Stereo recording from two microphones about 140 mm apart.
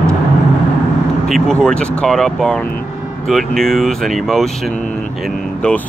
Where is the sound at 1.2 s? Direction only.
Centre (ahead or behind).